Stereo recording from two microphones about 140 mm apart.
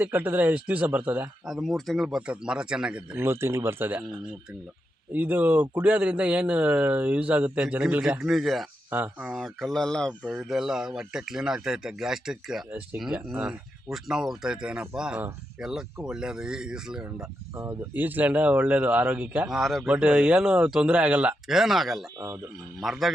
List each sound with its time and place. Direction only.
0.0 s speech: 15° right (ahead or behind)
3.2 s speech: 15° right (ahead or behind)
5.1 s speech: 10° right (ahead or behind)
17.5 s speech: 20° right (ahead or behind); by 23.1 s centre (ahead or behind)